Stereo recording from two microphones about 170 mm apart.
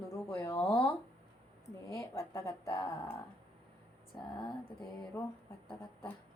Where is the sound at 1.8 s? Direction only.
20° left (ahead or behind).